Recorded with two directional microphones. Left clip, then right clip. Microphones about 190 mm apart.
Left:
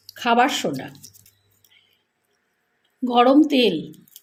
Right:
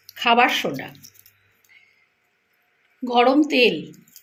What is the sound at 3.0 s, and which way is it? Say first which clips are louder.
Speech: left 1 dB; 45° left (ahead or behind).